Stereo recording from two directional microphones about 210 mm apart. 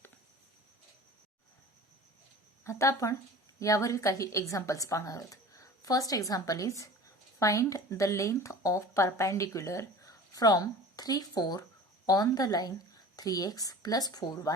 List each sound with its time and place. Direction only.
2.6 s speech: 15° left (ahead or behind)